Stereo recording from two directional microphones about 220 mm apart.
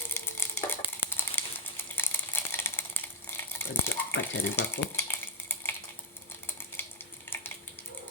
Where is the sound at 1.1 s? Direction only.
10° left (ahead or behind).